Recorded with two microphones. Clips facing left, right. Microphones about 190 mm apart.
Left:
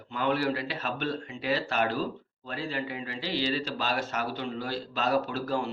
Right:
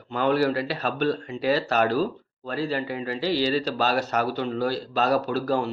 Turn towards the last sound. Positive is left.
turn(degrees=-40)  # may be behind; listen again after turning